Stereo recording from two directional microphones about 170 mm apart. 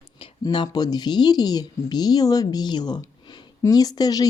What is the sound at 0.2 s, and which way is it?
Speech, 25° left (ahead or behind).